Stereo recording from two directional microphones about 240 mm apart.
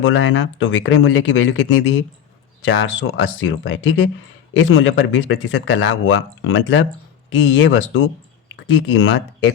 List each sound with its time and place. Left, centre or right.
0.0 s speech: left